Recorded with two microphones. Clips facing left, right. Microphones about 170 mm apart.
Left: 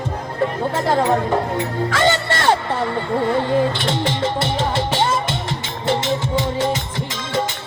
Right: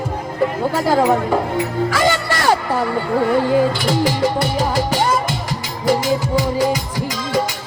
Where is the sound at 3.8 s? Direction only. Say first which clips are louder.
Right 4 dB; 25° left (ahead or behind).